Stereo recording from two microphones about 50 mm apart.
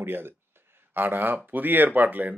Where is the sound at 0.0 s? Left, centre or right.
Right.